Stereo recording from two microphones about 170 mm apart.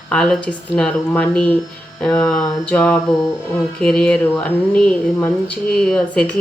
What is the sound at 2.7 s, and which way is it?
A woman's voice, 15° left (ahead or behind).